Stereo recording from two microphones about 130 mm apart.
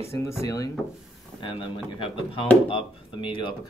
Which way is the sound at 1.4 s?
40° left (ahead or behind).